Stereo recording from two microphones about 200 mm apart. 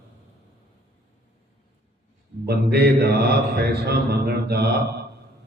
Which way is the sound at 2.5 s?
55° right (ahead or behind).